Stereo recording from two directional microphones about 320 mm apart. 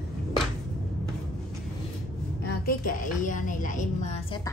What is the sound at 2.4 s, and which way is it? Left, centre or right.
A woman's voice, left.